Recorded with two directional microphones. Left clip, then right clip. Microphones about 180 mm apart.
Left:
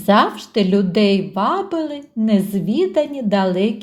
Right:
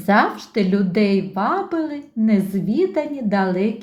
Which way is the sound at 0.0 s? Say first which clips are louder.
Left 2 dB; 30° left (ahead or behind).